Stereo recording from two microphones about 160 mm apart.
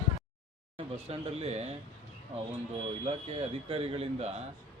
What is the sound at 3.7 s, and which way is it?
Speech, 35° right (ahead or behind).